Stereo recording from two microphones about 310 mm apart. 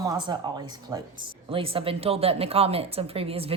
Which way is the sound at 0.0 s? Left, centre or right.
Centre.